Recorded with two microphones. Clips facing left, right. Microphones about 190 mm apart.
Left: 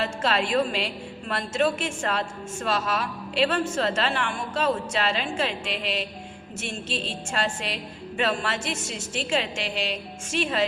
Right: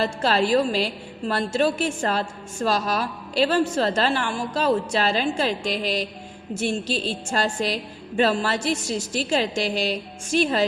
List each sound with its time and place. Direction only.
0.0 s a woman's voice: 35° right (ahead or behind)